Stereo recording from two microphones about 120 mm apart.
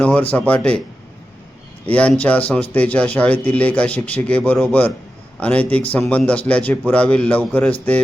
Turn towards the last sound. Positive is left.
turn(degrees=10)  # may be behind; listen again after turning